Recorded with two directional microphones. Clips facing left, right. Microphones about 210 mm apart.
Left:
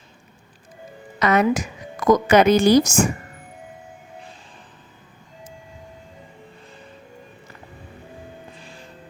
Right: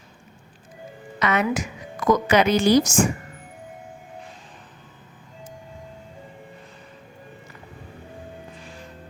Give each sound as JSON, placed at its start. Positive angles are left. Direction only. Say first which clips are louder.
{"t": 1.2, "sound": "a woman's voice", "louder": "left 4 dB", "side_deg": 40}